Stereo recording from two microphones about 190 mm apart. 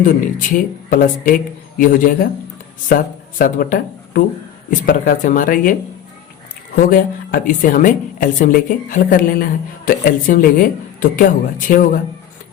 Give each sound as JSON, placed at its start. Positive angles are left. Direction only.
{"t": 0.0, "sound": "a woman's voice", "side_deg": 45}
{"t": 6.7, "sound": "a woman's voice", "side_deg": 45}